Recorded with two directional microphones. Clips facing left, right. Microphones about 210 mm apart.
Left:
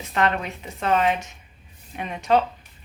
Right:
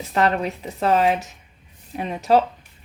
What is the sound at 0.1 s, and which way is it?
A woman's voice, 35° right (ahead or behind).